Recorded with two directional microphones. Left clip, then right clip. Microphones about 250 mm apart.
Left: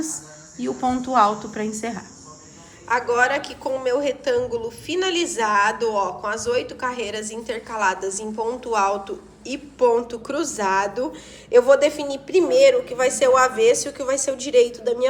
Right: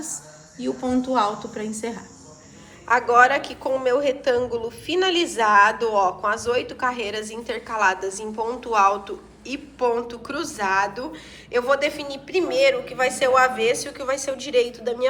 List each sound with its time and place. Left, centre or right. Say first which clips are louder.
0.9 s speech: left 4 dB; left
2.8 s a woman's voice: right 3 dB; centre